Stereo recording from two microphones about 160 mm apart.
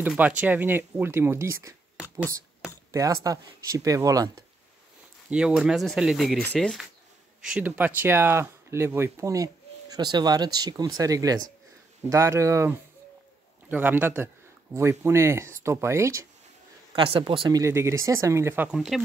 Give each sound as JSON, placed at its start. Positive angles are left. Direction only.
{"t": 0.1, "sound": "speech", "side_deg": -10}
{"t": 2.9, "sound": "speech", "side_deg": -20}
{"t": 5.3, "sound": "speech", "side_deg": -5}
{"t": 7.4, "sound": "speech", "side_deg": -5}
{"t": 16.9, "sound": "speech", "side_deg": -35}
{"t": 17.6, "sound": "speech", "side_deg": -15}